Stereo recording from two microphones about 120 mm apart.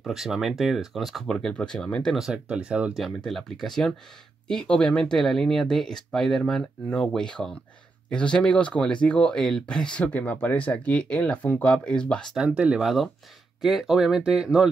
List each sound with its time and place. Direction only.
0.0 s speech: 5° right (ahead or behind)
2.1 s speech: 5° right (ahead or behind)
3.3 s speech: centre (ahead or behind)
12.4 s speech: 10° right (ahead or behind)